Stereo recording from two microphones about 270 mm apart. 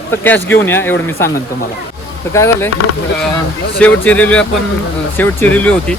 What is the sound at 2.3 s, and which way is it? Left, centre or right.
Speech, centre.